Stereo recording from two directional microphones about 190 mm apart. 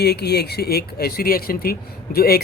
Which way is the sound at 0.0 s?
60° left (ahead or behind).